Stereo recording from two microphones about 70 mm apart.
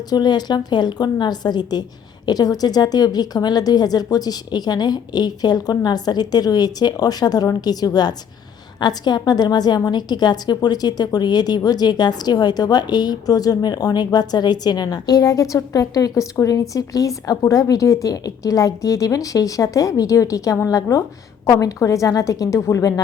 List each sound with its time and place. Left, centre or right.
0.1 s a woman's voice: left
2.2 s a woman's voice: left
8.8 s a woman's voice: left